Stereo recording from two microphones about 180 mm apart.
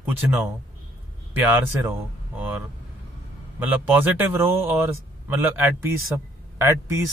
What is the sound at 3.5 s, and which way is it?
A man's voice, 10° right (ahead or behind).